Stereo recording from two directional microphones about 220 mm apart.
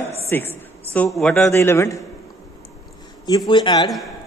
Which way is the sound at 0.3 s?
10° left (ahead or behind).